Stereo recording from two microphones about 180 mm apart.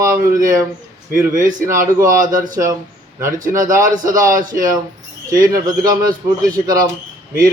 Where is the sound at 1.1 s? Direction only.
45° right (ahead or behind).